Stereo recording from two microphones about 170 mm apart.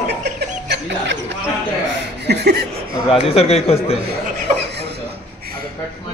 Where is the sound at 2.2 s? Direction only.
75° right (ahead or behind).